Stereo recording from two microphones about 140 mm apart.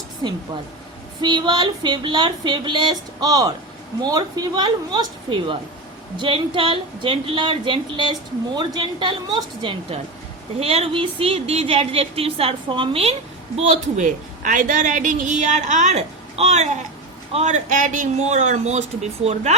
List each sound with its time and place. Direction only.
0.2 s speech: 30° right (ahead or behind)
10.6 s speech: 45° right (ahead or behind)
13.6 s a woman's voice: 55° right (ahead or behind)